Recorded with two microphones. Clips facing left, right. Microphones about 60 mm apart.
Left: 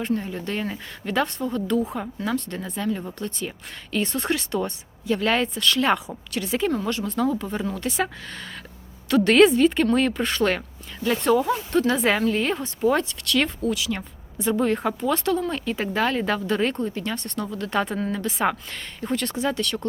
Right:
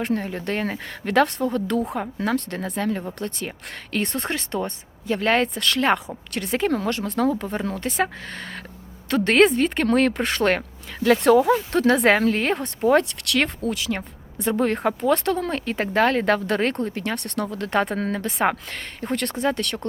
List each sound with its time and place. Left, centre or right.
0.0 s speech: right
4.3 s speech: right
11.0 s speech: right
13.6 s speech: right